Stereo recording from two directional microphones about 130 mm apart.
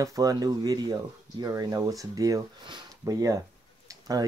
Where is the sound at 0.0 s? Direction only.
25° right (ahead or behind).